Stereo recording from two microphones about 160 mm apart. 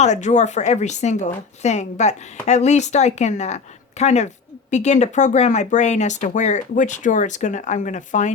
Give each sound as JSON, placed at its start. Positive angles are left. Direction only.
{"t": 0.0, "sound": "speech", "side_deg": 45}